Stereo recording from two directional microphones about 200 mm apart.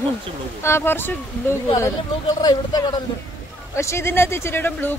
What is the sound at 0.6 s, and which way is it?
Speech, 10° left (ahead or behind).